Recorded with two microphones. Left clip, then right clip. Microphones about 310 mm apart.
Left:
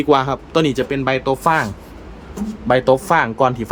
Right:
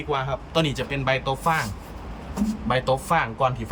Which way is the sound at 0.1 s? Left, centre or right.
Centre.